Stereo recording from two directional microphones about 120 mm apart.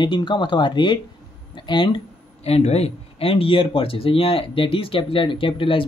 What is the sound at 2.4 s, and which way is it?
Speech, 60° left (ahead or behind).